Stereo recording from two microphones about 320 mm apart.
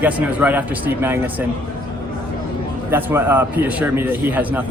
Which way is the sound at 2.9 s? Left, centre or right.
Centre.